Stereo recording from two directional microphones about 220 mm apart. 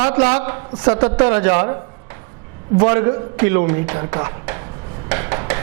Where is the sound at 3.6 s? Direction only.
30° right (ahead or behind).